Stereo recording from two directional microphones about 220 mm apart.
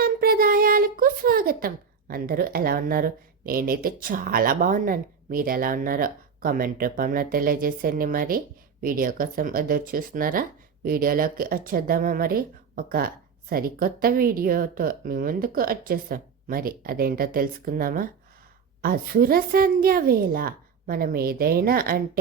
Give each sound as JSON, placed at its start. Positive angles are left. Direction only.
{"t": 0.0, "sound": "a woman's voice", "side_deg": -40}